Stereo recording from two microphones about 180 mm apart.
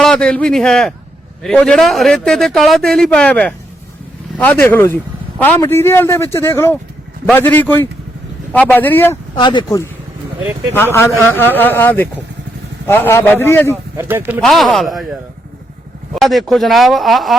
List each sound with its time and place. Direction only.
0.0 s a man's voice: 5° left (ahead or behind)
9.3 s speech: 25° left (ahead or behind)
11.2 s speech: 10° left (ahead or behind)
13.9 s speech: 15° right (ahead or behind)
14.4 s a man's voice: centre (ahead or behind)
16.1 s a man's voice: centre (ahead or behind)